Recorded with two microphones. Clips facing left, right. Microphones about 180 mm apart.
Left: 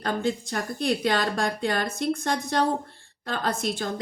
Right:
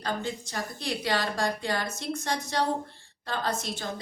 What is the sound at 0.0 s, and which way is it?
Speech, 55° left (ahead or behind).